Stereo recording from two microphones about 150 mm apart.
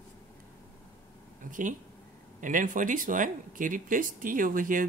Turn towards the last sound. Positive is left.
turn(degrees=-65)  # may be behind; listen again after turning